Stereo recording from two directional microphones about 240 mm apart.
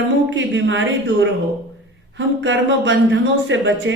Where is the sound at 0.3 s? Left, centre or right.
Right.